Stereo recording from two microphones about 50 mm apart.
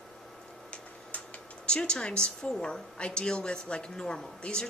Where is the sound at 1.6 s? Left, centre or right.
Centre.